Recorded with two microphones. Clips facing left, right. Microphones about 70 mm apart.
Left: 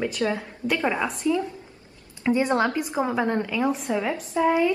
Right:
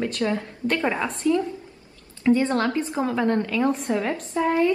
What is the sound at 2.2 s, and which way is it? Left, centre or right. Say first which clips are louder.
A woman's voice: right 1 dB; centre.